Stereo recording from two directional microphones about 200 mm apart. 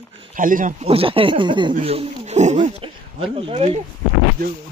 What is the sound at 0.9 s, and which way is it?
A man's voice, 25° right (ahead or behind).